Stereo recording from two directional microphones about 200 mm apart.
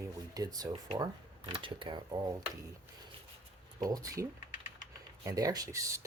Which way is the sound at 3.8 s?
20° right (ahead or behind).